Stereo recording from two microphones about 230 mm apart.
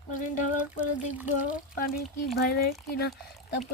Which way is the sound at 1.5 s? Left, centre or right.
Left.